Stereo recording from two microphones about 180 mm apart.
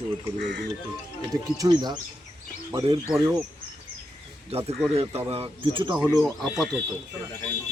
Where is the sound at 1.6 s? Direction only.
20° right (ahead or behind).